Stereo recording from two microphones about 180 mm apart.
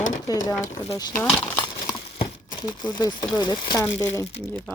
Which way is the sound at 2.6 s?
20° left (ahead or behind).